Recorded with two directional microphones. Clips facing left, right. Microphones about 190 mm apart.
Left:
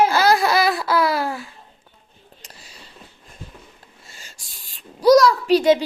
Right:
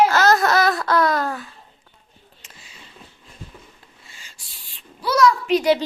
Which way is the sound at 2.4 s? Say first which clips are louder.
Left 2 dB; 40° left (ahead or behind).